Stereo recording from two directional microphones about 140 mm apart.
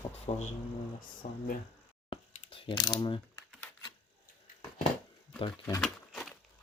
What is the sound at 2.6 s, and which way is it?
Speech, 30° left (ahead or behind).